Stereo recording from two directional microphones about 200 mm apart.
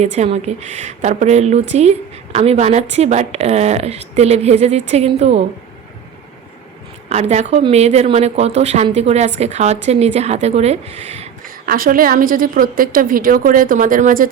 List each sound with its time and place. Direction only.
0.0 s a woman's voice: 35° right (ahead or behind)
7.1 s a woman's voice: 35° right (ahead or behind)
11.6 s a woman's voice: 45° right (ahead or behind)